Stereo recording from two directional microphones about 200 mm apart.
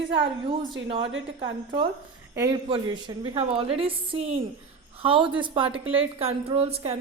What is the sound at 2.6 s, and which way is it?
A woman's voice, 25° right (ahead or behind).